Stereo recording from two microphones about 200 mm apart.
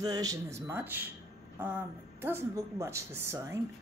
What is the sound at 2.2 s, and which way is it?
Speech, 10° right (ahead or behind).